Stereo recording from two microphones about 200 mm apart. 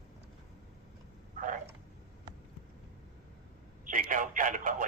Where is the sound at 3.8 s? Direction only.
45° right (ahead or behind).